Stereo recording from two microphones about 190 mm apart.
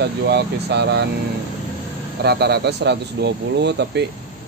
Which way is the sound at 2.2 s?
60° right (ahead or behind).